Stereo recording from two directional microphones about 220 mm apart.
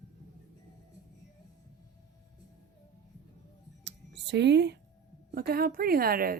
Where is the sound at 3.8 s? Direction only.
50° right (ahead or behind).